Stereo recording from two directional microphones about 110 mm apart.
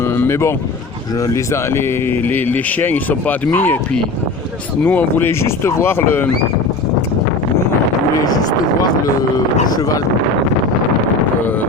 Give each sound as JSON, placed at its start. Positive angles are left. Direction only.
{"t": 0.0, "sound": "speech", "side_deg": 20}
{"t": 9.6, "sound": "speech", "side_deg": 35}